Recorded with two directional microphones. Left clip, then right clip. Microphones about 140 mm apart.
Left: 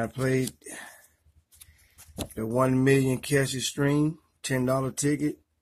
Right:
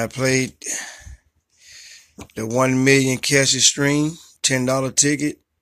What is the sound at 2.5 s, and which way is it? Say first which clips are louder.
Speech: right 7 dB; 25° right (ahead or behind).